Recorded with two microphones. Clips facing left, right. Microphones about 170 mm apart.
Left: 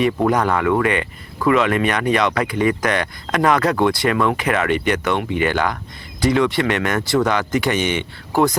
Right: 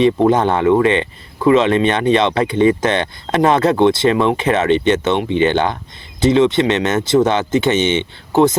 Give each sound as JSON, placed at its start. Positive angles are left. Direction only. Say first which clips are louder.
{"t": 0.0, "sound": "speech", "louder": "right 5 dB", "side_deg": -25}